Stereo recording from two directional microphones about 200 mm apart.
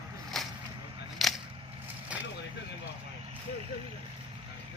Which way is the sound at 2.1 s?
5° right (ahead or behind).